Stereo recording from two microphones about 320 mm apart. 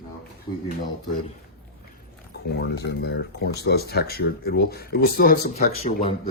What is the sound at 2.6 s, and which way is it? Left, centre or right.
Speech, left.